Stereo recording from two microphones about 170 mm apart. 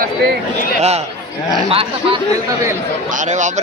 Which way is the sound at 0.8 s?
40° right (ahead or behind).